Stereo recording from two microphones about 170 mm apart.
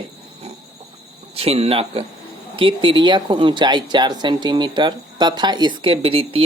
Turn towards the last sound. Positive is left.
turn(degrees=-35)  # may be behind; listen again after turning